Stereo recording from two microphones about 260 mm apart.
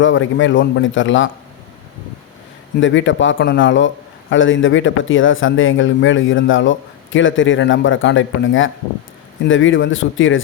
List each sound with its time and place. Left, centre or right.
0.0 s a man's voice: left
2.8 s a man's voice: left